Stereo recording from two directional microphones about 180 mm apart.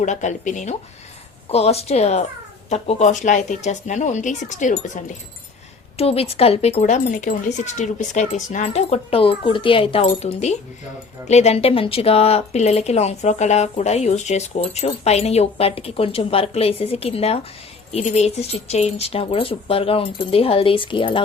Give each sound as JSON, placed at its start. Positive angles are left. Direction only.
{"t": 0.0, "sound": "speech", "side_deg": 40}